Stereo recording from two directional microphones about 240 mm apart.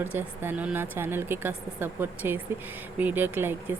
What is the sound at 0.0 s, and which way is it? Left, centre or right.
Speech, centre.